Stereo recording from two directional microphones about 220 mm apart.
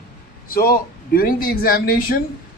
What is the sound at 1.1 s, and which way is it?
A man's voice, 40° left (ahead or behind).